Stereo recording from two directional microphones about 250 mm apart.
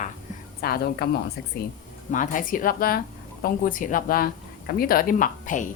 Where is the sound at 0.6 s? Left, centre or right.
Left.